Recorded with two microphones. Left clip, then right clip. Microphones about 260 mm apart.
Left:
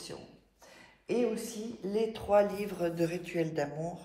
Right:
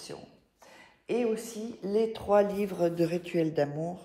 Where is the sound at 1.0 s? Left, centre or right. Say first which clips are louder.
Right 2 dB; right.